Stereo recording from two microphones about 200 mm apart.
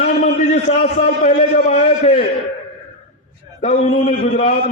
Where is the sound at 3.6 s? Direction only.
35° left (ahead or behind).